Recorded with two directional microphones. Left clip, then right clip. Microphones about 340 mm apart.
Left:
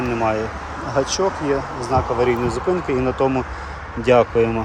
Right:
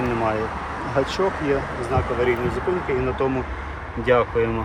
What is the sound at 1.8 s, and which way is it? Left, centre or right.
Speech, centre.